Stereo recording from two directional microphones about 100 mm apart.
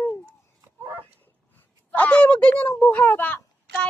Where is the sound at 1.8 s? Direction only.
15° left (ahead or behind).